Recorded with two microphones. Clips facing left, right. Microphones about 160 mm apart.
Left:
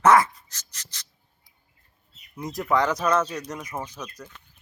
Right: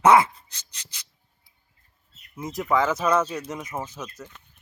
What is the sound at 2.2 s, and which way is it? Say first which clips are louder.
Speech: even; centre (ahead or behind).